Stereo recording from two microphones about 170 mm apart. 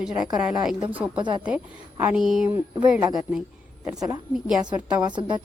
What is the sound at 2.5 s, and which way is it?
Speech, 15° right (ahead or behind).